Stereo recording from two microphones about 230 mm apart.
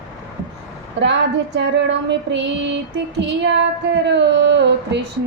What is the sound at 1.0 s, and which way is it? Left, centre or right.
Music, right.